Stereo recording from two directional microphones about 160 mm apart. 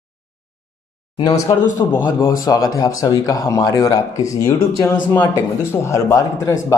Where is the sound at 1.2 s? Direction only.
20° left (ahead or behind).